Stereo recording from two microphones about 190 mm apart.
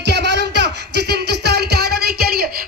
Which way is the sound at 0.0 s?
60° right (ahead or behind).